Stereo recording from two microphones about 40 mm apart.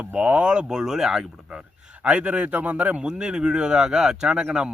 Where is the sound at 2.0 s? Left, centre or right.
Right.